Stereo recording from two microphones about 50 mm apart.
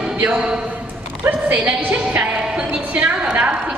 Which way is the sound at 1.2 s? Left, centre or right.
Right.